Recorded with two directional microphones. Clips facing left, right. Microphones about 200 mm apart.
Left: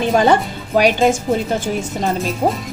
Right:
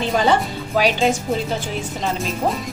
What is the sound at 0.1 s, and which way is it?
Speech, 50° left (ahead or behind).